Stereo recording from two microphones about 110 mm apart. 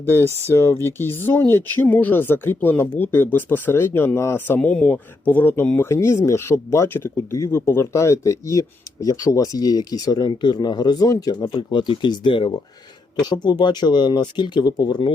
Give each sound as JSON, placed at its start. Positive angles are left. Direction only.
{"t": 0.0, "sound": "speech", "side_deg": 20}